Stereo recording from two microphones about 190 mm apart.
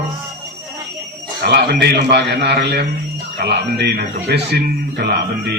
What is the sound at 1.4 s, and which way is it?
A man's voice, 60° right (ahead or behind).